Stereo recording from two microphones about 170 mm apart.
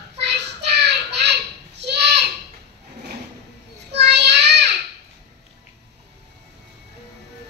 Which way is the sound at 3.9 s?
85° right.